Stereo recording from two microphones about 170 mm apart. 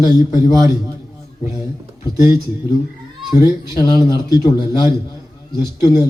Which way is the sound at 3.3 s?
25° left (ahead or behind).